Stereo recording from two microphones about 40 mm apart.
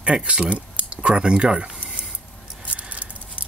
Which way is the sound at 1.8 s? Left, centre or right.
Right.